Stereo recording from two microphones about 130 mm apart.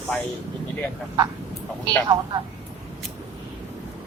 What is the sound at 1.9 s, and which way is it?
Speech, 35° right (ahead or behind).